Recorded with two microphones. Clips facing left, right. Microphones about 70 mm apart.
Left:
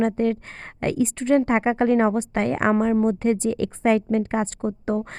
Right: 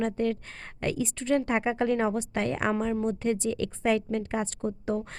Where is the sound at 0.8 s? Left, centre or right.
Left.